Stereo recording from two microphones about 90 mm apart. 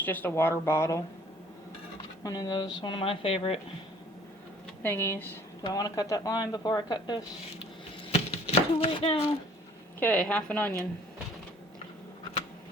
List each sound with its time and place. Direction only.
0.0 s speech: 20° left (ahead or behind)
2.2 s speech: 45° left (ahead or behind)
3.0 s a woman's voice: 90° left
4.8 s speech: 25° left (ahead or behind)
5.6 s speech: 45° left (ahead or behind)
7.6 s a sound: 90° left
10.0 s a woman's voice: 15° left (ahead or behind)